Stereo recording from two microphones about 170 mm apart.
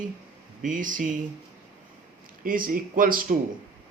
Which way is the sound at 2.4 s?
55° right (ahead or behind).